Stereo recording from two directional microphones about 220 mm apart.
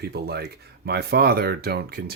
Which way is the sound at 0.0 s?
45° right (ahead or behind).